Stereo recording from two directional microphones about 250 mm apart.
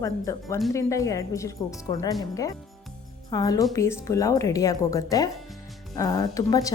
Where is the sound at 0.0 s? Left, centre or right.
Centre.